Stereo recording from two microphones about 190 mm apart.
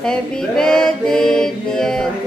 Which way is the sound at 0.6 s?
5° left (ahead or behind).